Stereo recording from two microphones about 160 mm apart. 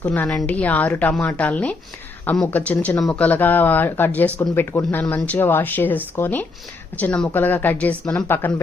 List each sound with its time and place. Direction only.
0.0 s speech: 10° left (ahead or behind)